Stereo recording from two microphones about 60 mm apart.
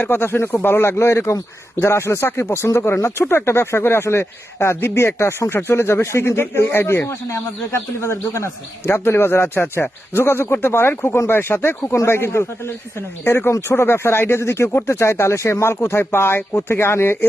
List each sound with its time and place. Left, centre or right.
0.0 s speech: left
8.9 s speech: left